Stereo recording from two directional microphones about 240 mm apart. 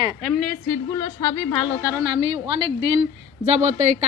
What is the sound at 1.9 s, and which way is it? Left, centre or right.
A woman's voice, centre.